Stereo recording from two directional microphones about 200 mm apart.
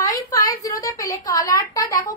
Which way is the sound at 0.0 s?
15° left (ahead or behind).